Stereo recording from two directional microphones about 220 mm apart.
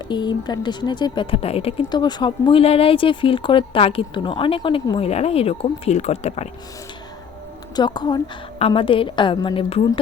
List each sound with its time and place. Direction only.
0.1 s speech: 20° left (ahead or behind)
7.8 s speech: 20° left (ahead or behind)